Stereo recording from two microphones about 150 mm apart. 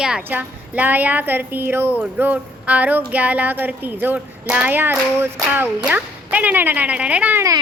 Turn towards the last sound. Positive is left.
turn(degrees=-10)  # may be behind; listen again after turning